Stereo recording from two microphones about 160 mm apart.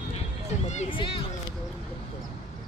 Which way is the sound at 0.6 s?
45° left (ahead or behind).